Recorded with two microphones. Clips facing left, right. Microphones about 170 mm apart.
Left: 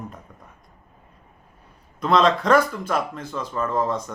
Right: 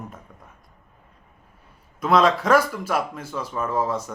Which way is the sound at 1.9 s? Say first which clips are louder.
Even; 5° right (ahead or behind).